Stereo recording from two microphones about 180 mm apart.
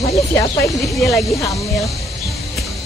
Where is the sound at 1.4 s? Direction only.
15° left (ahead or behind).